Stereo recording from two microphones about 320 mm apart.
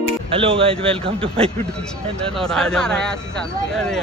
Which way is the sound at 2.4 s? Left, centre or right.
Centre.